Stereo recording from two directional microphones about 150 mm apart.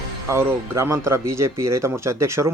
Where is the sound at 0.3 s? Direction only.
15° right (ahead or behind).